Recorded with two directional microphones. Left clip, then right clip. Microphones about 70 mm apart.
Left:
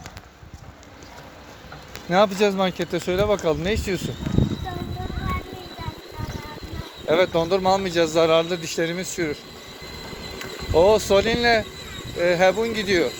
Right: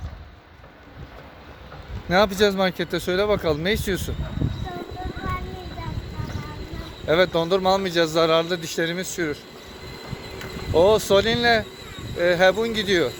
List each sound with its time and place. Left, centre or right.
2.0 s speech: right
7.1 s a man's voice: right
9.9 s train: centre
10.3 s speech: right